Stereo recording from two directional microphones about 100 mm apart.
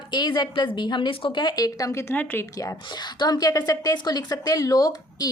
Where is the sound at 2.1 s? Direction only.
20° left (ahead or behind).